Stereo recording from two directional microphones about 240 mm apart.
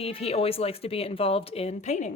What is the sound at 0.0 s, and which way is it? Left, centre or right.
Speech, left.